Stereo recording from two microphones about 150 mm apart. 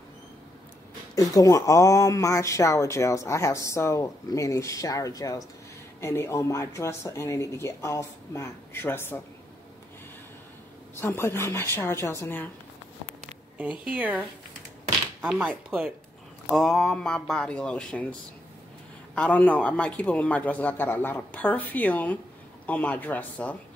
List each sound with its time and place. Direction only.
1.1 s speech: 20° left (ahead or behind)
11.0 s a man's voice: 15° left (ahead or behind)
13.6 s speech: 10° right (ahead or behind)
15.2 s speech: 5° right (ahead or behind)
19.1 s a man's voice: 10° left (ahead or behind)